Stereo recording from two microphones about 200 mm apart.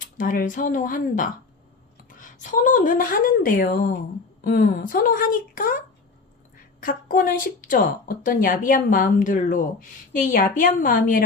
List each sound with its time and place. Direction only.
0.0 s a woman's voice: 45° left (ahead or behind)